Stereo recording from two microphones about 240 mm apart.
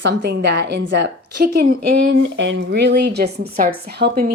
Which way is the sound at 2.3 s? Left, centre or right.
Right.